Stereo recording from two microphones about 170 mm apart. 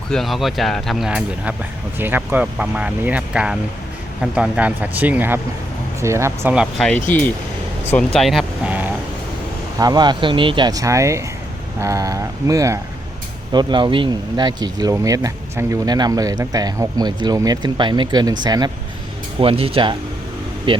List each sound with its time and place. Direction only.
0.1 s speech: centre (ahead or behind)
9.7 s speech: 25° right (ahead or behind)